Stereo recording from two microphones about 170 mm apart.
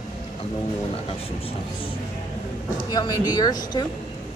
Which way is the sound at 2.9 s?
25° left (ahead or behind).